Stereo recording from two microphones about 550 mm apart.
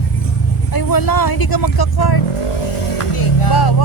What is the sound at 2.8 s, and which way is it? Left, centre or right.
Music, left.